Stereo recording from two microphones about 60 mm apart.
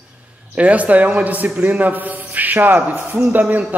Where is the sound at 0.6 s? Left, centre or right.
Right.